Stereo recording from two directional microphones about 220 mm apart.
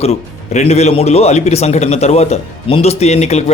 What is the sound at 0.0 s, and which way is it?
Speech, 30° left (ahead or behind).